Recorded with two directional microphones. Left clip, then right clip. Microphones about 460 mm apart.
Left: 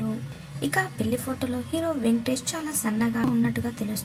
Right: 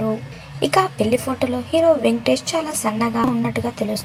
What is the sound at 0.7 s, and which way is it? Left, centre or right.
A woman's voice, left.